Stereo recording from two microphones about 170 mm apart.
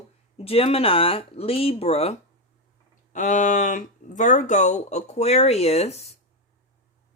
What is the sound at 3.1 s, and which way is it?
Speech, 50° left (ahead or behind).